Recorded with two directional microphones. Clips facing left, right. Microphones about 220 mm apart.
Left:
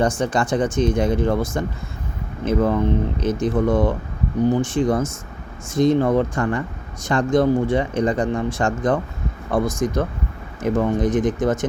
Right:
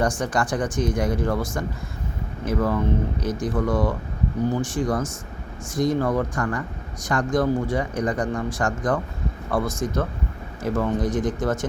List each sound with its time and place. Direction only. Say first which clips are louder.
0.0 s speech: left 3 dB; 25° left (ahead or behind)